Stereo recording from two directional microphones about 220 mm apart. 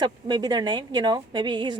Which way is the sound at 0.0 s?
20° right (ahead or behind).